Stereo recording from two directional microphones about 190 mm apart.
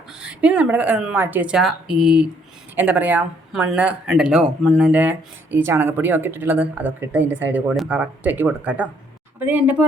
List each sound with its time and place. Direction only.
0.1 s speech: 5° right (ahead or behind)